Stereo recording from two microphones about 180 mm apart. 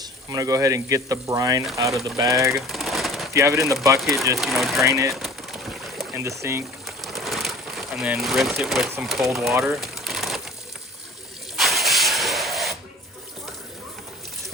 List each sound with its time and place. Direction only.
0.0 s speech: 20° right (ahead or behind)
2.6 s a sound: centre (ahead or behind)
3.3 s speech: 15° right (ahead or behind)
4.4 s speech: centre (ahead or behind)
4.8 s speech: 15° right (ahead or behind)
5.1 s bird: centre (ahead or behind)
6.1 s speech: 15° right (ahead or behind)
6.8 s pigeon: centre (ahead or behind)
9.5 s speech: 15° right (ahead or behind)
9.8 s crumpling: centre (ahead or behind)
11.5 s a sound: centre (ahead or behind)